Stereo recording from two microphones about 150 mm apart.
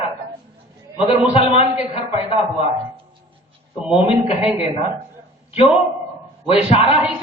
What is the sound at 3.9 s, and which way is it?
Speech, 40° left (ahead or behind).